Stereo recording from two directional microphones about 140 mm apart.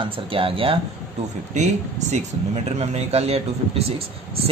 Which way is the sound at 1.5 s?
55° right (ahead or behind).